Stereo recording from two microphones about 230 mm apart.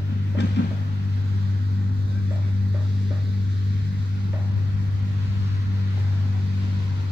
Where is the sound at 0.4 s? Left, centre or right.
Left.